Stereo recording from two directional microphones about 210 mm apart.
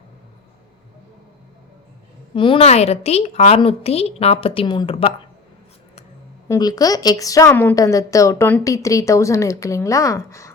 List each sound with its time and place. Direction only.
2.3 s a woman's voice: 25° left (ahead or behind)
6.5 s a woman's voice: 20° left (ahead or behind)